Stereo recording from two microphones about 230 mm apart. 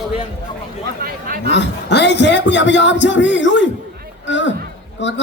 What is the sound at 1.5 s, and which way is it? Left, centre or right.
A man's voice, left.